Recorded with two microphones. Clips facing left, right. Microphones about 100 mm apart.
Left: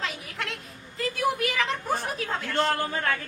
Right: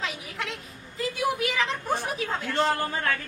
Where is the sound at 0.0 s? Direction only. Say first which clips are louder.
Even; centre (ahead or behind).